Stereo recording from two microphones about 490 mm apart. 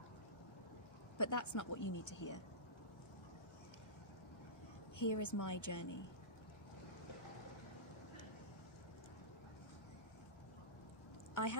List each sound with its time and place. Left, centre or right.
1.1 s speech: left
4.9 s speech: left